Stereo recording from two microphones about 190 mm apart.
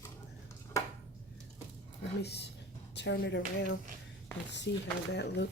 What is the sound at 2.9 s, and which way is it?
Speech, 65° left (ahead or behind).